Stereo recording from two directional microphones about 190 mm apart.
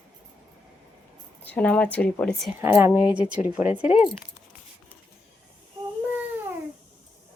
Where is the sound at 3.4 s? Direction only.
40° left (ahead or behind).